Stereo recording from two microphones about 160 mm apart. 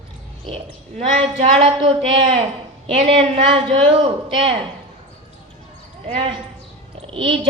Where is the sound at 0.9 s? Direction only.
40° right (ahead or behind).